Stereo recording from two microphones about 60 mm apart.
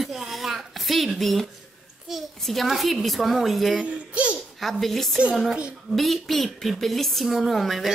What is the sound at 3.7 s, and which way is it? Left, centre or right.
Speech, right.